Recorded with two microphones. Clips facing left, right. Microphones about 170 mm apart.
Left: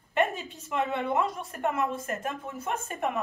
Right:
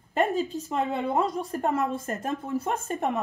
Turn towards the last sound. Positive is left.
turn(degrees=-35)  # may be behind; listen again after turning